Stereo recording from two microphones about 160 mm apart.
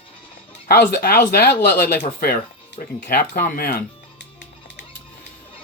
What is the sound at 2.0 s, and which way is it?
Speech, 65° left (ahead or behind).